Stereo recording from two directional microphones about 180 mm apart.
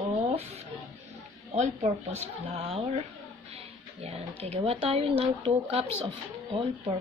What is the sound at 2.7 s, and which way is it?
Speech, 35° right (ahead or behind).